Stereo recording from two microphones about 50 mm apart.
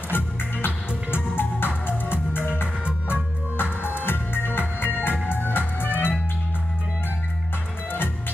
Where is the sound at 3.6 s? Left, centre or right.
Left.